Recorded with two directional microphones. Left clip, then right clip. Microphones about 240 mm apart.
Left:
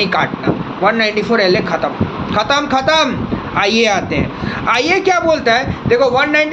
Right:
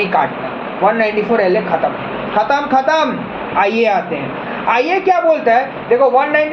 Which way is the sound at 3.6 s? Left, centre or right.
Left.